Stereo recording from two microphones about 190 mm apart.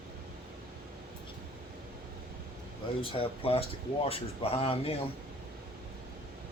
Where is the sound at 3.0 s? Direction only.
30° left (ahead or behind).